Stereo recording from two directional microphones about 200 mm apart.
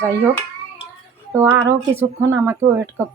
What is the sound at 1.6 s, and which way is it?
A woman's voice, 10° right (ahead or behind).